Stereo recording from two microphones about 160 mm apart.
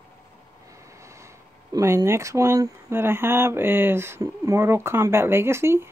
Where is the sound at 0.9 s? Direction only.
20° right (ahead or behind).